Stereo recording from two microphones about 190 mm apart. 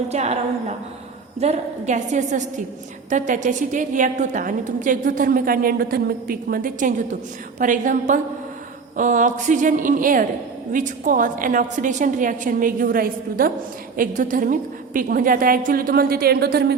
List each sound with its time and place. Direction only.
0.1 s a woman's voice: 35° right (ahead or behind)
1.4 s a woman's voice: 35° right (ahead or behind); by 16.7 s 55° right (ahead or behind)